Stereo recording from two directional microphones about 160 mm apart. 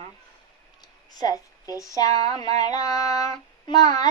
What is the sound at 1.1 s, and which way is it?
Speech, 25° left (ahead or behind).